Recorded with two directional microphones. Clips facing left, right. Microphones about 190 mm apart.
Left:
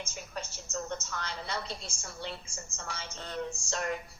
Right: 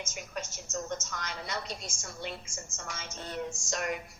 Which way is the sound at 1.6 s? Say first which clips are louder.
Right 1 dB; 15° right (ahead or behind).